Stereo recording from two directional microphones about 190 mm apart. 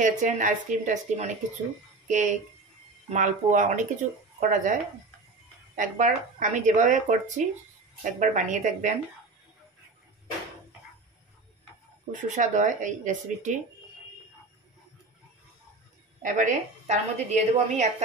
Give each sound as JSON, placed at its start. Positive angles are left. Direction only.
{"t": 0.0, "sound": "speech", "side_deg": -40}
{"t": 5.8, "sound": "speech", "side_deg": -40}
{"t": 12.1, "sound": "speech", "side_deg": -40}
{"t": 16.2, "sound": "speech", "side_deg": -40}